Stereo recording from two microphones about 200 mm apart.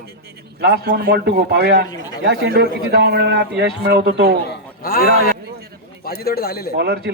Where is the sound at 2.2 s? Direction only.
55° right (ahead or behind).